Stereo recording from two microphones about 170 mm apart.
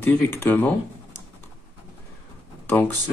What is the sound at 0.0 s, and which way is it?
Speech, 10° left (ahead or behind).